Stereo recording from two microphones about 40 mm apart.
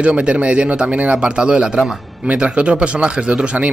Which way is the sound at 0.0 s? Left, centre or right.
Right.